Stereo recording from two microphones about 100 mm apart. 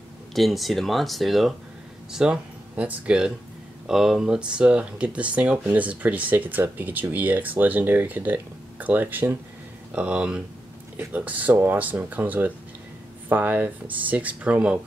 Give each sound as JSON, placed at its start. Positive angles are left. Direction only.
{"t": 0.3, "sound": "speech", "side_deg": 0}